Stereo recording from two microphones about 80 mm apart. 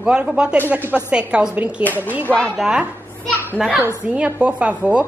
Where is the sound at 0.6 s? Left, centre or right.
Right.